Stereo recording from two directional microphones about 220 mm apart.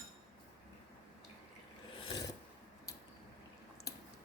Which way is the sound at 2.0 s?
20° left (ahead or behind).